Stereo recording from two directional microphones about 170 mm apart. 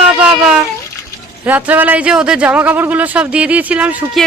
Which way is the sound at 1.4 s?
10° right (ahead or behind).